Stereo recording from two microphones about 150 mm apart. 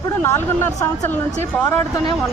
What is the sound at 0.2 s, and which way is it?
Speech, 20° left (ahead or behind).